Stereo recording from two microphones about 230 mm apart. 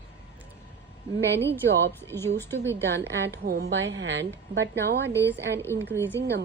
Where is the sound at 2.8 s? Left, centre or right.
Right.